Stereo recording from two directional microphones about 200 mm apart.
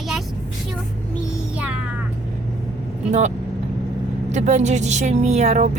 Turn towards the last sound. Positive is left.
turn(degrees=-35)  # may be behind; listen again after turning